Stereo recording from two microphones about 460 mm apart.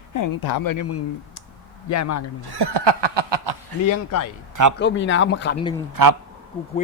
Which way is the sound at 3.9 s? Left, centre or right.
Left.